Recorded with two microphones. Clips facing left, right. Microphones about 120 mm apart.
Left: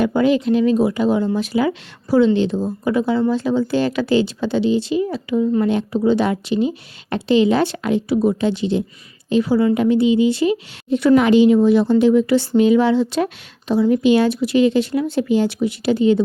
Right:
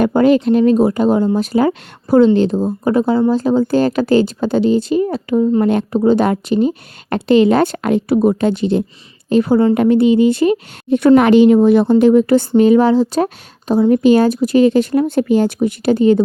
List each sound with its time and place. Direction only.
0.0 s a woman's voice: 50° right (ahead or behind)